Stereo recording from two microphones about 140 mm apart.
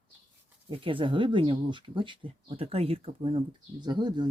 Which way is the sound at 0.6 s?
40° right (ahead or behind).